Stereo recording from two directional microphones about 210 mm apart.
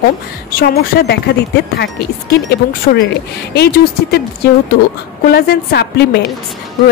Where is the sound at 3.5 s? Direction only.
50° left (ahead or behind).